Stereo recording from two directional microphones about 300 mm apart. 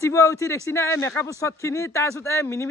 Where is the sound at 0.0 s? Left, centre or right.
Centre.